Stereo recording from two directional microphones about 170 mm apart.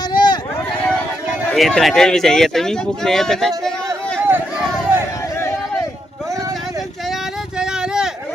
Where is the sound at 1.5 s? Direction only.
Centre (ahead or behind).